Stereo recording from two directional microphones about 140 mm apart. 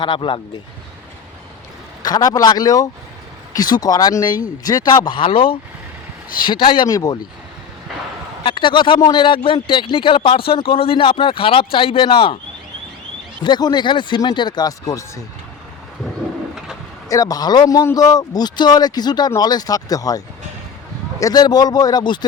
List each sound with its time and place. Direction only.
0.0 s speech: 35° left (ahead or behind)
2.0 s speech: 30° left (ahead or behind)
8.4 s speech: 35° left (ahead or behind)
13.4 s speech: 30° left (ahead or behind)
17.1 s speech: 25° left (ahead or behind)